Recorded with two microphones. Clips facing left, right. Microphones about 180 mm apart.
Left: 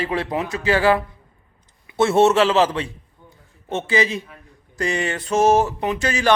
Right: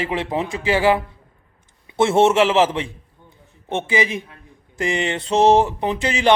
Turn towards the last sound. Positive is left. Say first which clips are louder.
# right 1 dB
turn(degrees=-20)  # may be behind; listen again after turning